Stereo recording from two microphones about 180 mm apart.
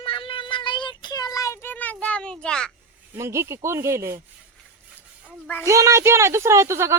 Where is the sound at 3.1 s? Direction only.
15° right (ahead or behind).